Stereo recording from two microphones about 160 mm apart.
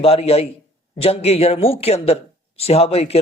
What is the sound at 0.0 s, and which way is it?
A man's voice, 40° left (ahead or behind).